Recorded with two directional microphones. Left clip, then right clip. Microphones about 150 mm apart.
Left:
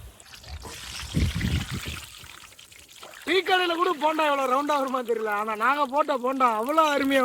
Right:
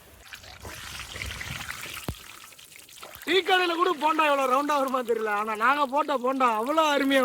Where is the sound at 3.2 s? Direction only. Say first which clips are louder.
Even; 20° left (ahead or behind).